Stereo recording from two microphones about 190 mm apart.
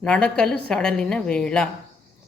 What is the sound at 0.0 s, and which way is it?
A woman's voice, 5° left (ahead or behind).